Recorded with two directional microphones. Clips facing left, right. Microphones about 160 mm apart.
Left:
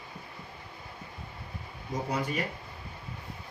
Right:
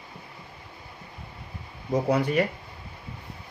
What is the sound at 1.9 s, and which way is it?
Speech, 65° right (ahead or behind).